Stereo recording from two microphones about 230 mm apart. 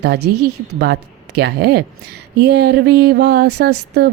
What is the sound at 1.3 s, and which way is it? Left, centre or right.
A woman's voice, right.